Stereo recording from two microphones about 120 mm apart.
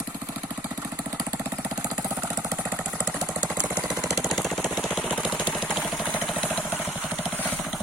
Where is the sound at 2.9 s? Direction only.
10° right (ahead or behind).